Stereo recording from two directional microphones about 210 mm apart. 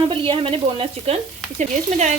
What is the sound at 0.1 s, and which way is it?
Speech, 25° right (ahead or behind).